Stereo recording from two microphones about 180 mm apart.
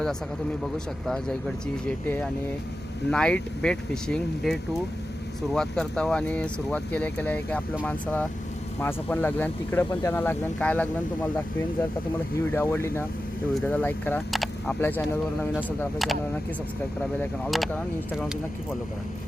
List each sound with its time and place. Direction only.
0.6 s speech: centre (ahead or behind)
12.5 s speech: 10° left (ahead or behind)
14.8 s speech: 10° left (ahead or behind)
16.0 s speech: centre (ahead or behind)